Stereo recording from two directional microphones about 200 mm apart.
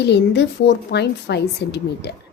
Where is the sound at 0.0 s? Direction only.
60° left (ahead or behind).